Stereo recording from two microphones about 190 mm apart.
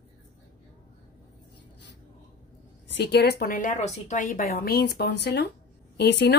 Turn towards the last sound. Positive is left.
turn(degrees=65)  # may be behind; listen again after turning